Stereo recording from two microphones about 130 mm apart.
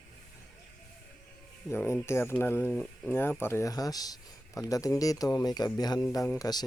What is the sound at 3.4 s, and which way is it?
Speech, 20° left (ahead or behind).